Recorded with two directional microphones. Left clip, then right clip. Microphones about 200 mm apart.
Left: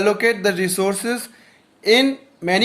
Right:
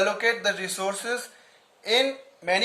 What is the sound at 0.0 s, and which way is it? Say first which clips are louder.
Speech: left 6 dB; 30° left (ahead or behind).